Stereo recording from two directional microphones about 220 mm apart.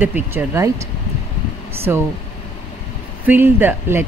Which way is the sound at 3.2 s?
10° right (ahead or behind).